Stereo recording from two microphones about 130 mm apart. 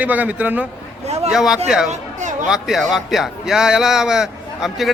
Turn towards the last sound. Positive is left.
turn(degrees=-5)  # may be behind; listen again after turning